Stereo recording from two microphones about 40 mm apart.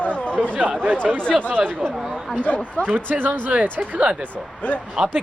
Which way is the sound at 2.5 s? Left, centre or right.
Left.